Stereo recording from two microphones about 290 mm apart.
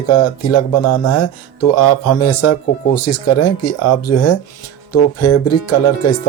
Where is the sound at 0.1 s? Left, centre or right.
Left.